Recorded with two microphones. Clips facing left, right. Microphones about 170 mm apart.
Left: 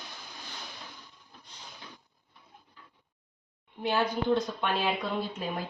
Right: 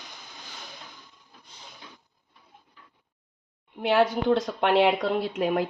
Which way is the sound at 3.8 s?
85° right.